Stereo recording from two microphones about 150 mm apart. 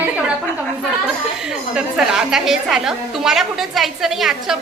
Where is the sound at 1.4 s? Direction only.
5° right (ahead or behind).